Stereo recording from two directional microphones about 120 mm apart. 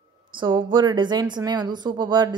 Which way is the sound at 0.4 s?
40° right (ahead or behind).